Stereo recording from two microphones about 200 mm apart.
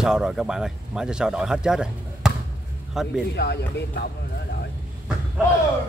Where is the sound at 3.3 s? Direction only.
55° left (ahead or behind).